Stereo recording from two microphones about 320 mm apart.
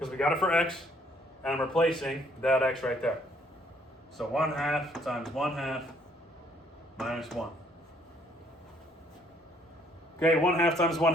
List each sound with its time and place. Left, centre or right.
0.0 s a man's voice: centre
4.2 s a man's voice: centre
7.0 s a man's voice: centre
10.2 s a man's voice: centre